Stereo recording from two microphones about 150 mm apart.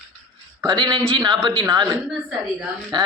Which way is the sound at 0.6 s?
25° right (ahead or behind).